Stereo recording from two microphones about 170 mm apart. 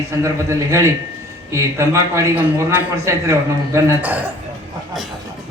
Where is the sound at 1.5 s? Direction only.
15° right (ahead or behind).